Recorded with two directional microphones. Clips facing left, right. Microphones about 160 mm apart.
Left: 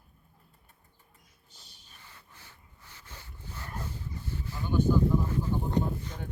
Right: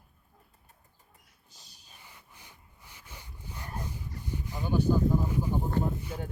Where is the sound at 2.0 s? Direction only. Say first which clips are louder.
Even; 15° right (ahead or behind).